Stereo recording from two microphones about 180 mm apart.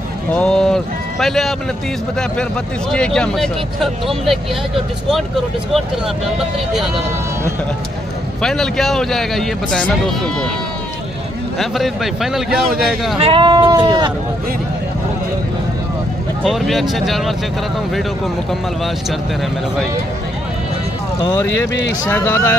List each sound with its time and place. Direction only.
0.3 s speech: 5° left (ahead or behind)
2.9 s speech: 5° left (ahead or behind)
8.4 s speech: centre (ahead or behind)
11.5 s speech: centre (ahead or behind)
13.2 s speech: 30° right (ahead or behind)
16.4 s speech: centre (ahead or behind)
22.1 s speech: 10° left (ahead or behind)